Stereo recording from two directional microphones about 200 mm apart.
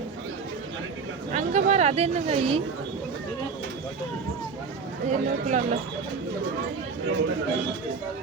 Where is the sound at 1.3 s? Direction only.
35° right (ahead or behind).